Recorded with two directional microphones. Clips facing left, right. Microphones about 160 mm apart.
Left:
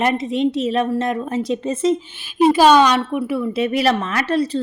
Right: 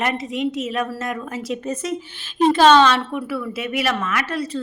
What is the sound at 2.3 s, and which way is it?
A woman's voice, 10° left (ahead or behind).